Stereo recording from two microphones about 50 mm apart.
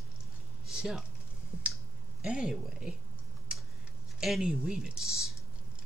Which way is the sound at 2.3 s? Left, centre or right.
Centre.